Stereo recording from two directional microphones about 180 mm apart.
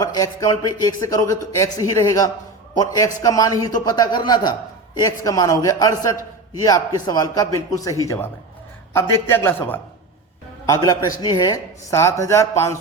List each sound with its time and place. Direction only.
0.0 s speech: 20° left (ahead or behind)